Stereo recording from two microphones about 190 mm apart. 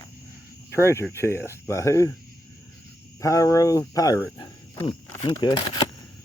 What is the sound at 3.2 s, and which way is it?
Speech, 15° left (ahead or behind).